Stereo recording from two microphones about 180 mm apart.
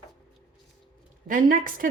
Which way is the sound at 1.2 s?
50° right (ahead or behind).